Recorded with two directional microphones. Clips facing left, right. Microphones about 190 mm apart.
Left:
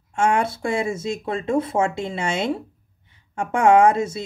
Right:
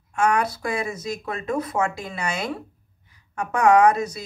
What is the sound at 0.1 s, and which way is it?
Speech, 25° left (ahead or behind).